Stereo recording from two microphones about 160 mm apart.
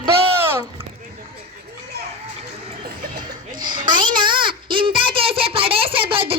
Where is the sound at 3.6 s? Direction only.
30° right (ahead or behind).